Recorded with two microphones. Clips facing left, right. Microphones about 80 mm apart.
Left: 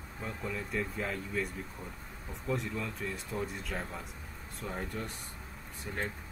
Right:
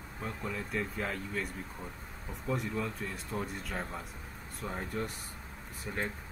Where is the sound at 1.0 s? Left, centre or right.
Right.